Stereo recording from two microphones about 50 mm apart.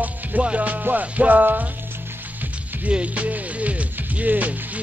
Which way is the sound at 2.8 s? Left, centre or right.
Right.